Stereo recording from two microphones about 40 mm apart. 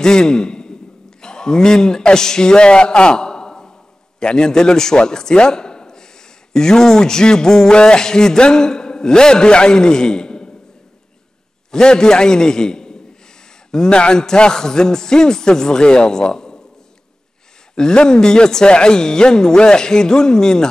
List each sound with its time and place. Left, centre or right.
0.0 s a man's voice: centre
11.7 s speech: centre
17.7 s speech: centre